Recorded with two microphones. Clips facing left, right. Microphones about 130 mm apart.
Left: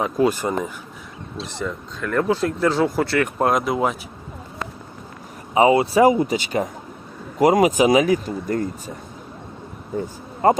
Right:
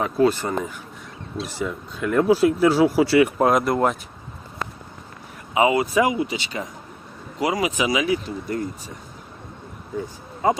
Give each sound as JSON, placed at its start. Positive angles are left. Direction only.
{"t": 0.0, "sound": "speech", "side_deg": 15}
{"t": 1.5, "sound": "speech", "side_deg": -5}
{"t": 5.5, "sound": "speech", "side_deg": 30}
{"t": 10.0, "sound": "speech", "side_deg": 55}